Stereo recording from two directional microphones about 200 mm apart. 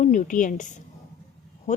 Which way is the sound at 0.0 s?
40° left (ahead or behind).